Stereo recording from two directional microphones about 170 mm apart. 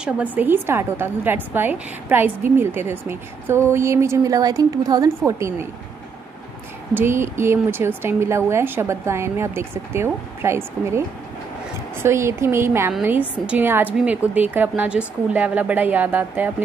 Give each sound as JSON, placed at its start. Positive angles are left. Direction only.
{"t": 0.0, "sound": "a woman's voice", "side_deg": -10}
{"t": 6.9, "sound": "a woman's voice", "side_deg": -15}
{"t": 12.0, "sound": "a woman's voice", "side_deg": -15}